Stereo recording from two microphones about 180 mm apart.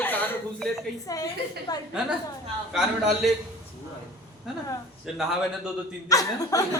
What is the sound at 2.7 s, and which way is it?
Speech, centre (ahead or behind).